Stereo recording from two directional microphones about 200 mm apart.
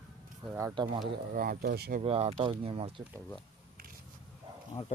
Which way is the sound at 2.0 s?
30° right (ahead or behind).